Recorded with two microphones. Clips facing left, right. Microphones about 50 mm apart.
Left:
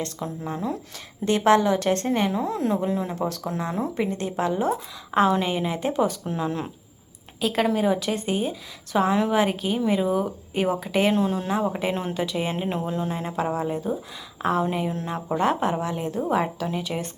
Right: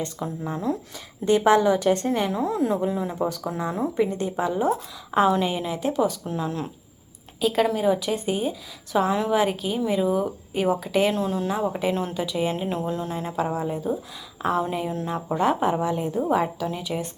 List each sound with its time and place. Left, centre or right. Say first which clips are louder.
0.2 s speech: even; centre
1.2 s a woman's voice: right 1 dB; left
1.5 s a woman's voice: right 1 dB; centre
2.3 s speech: right 1 dB; centre
4.1 s a woman's voice: right 1 dB; left
4.6 s a woman's voice: right 1 dB; centre
16.3 s a woman's voice: left 1 dB; centre